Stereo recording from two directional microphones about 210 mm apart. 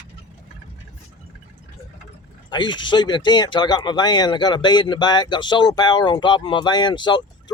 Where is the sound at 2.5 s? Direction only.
20° left (ahead or behind).